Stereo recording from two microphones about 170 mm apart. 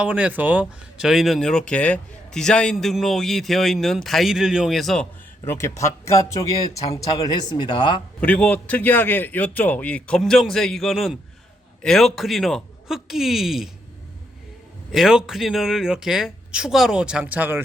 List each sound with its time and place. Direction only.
0.0 s speech: 10° right (ahead or behind)
5.5 s a man's voice: 15° left (ahead or behind)
8.2 s a man's voice: 10° left (ahead or behind)
14.9 s speech: centre (ahead or behind)